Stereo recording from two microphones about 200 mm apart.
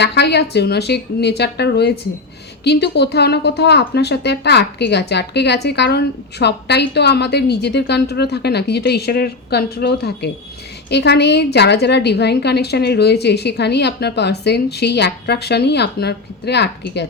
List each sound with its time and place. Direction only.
0.0 s a woman's voice: 55° left (ahead or behind)